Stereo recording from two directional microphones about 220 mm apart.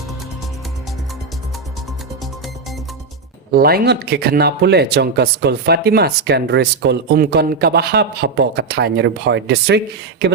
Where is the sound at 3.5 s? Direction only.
45° right (ahead or behind).